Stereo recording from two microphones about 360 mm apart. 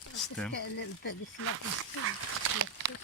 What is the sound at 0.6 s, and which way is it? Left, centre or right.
Speech, left.